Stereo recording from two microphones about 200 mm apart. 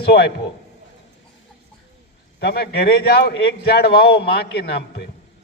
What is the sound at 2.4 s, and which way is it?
A man's voice, 55° left (ahead or behind).